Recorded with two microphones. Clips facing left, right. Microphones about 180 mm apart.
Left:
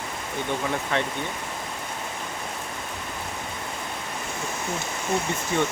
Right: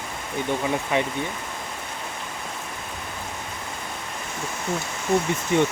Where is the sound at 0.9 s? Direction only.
10° right (ahead or behind).